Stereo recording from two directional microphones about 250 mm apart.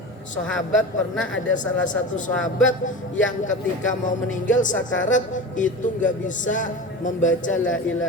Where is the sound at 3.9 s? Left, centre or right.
Left.